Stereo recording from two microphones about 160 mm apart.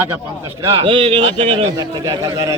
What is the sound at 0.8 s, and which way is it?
A man's voice, 35° right (ahead or behind).